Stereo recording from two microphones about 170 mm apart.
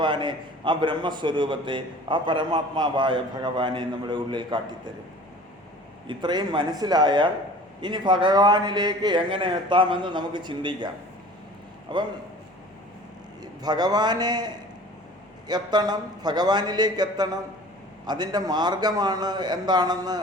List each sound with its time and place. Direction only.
0.0 s a man's voice: 25° right (ahead or behind)
6.1 s a man's voice: 25° right (ahead or behind)
11.9 s a man's voice: 30° right (ahead or behind)
13.4 s a man's voice: 25° right (ahead or behind)